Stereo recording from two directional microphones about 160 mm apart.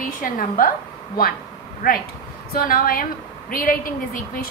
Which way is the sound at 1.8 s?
65° left (ahead or behind).